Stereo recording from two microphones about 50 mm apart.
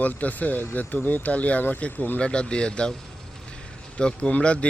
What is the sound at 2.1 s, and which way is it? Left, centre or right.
Speech, left.